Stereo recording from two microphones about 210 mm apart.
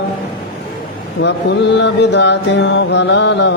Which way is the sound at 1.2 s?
55° left (ahead or behind).